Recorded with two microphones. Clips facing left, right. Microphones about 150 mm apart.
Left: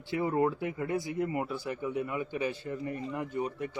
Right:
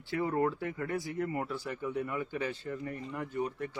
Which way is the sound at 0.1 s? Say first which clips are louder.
Left 2 dB; 15° left (ahead or behind).